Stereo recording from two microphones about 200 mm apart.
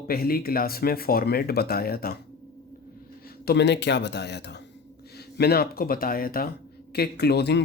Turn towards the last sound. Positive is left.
turn(degrees=55)  # may be behind; listen again after turning